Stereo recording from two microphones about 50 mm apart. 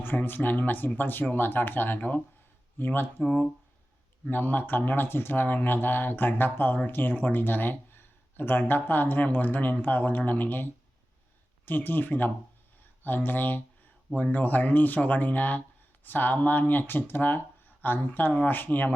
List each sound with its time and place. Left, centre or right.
0.0 s speech: left
2.7 s speech: left
4.3 s speech: left